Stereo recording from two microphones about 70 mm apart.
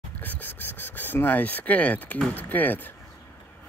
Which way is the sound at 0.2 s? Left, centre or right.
Left.